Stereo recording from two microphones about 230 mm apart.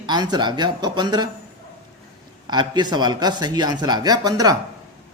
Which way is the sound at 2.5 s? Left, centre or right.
Centre.